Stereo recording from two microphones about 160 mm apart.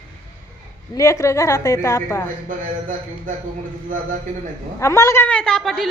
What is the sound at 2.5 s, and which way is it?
Speech, 50° right (ahead or behind).